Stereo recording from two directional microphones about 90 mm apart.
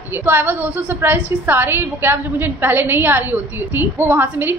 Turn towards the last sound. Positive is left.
turn(degrees=-20)  # may be behind; listen again after turning